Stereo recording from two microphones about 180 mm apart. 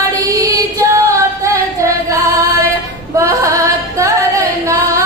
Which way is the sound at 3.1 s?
15° right (ahead or behind).